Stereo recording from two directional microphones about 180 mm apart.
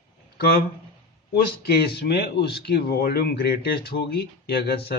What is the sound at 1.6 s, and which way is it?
Speech, 65° left (ahead or behind).